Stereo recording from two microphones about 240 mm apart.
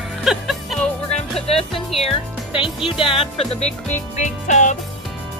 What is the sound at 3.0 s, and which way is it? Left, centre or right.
Speech, left.